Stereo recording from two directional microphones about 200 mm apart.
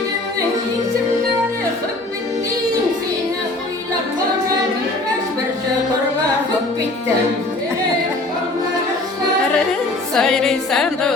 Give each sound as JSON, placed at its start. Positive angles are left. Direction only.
{"t": 10.2, "sound": "music", "side_deg": 0}